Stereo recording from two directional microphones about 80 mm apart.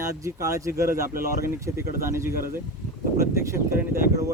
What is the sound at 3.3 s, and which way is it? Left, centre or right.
Speech, right.